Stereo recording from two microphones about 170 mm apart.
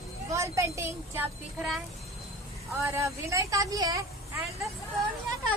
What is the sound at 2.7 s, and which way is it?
Speech, 15° right (ahead or behind).